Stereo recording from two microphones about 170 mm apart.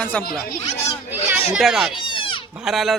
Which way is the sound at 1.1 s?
10° right (ahead or behind).